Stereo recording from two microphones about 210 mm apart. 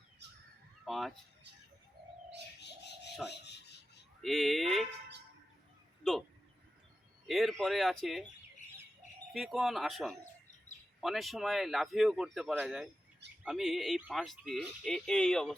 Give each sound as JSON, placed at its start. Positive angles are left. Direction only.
{"t": 0.9, "sound": "speech", "side_deg": 0}
{"t": 2.6, "sound": "bird", "side_deg": 55}
{"t": 3.2, "sound": "filing", "side_deg": 55}
{"t": 4.2, "sound": "speech", "side_deg": 0}
{"t": 6.0, "sound": "speech", "side_deg": 0}
{"t": 7.3, "sound": "speech", "side_deg": 0}
{"t": 9.3, "sound": "speech", "side_deg": 0}